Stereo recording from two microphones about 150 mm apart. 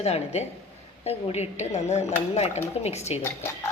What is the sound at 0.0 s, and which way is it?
Speech, 45° left (ahead or behind).